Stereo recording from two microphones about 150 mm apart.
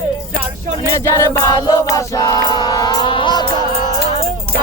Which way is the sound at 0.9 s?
20° left (ahead or behind).